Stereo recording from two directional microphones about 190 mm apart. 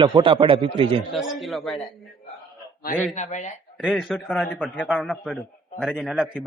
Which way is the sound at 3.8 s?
Centre (ahead or behind).